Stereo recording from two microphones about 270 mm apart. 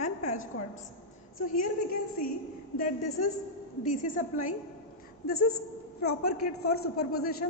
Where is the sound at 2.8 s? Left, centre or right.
Left.